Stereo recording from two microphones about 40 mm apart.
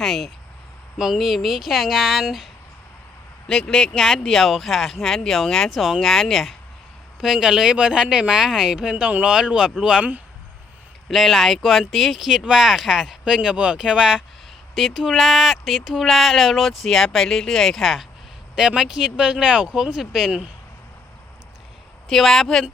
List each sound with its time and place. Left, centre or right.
0.0 s speech: centre
0.9 s speech: centre
3.4 s a man's voice: centre
3.9 s speech: centre
5.7 s speech: centre
7.2 s speech: centre
11.1 s speech: centre
12.4 s speech: centre
18.8 s speech: centre
22.1 s speech: centre